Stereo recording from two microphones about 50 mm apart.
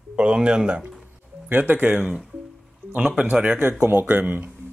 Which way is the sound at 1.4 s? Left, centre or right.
Right.